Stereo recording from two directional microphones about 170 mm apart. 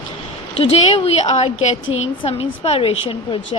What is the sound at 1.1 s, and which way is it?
A woman's voice, 40° left (ahead or behind).